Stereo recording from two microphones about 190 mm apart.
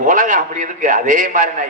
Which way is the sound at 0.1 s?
45° right (ahead or behind).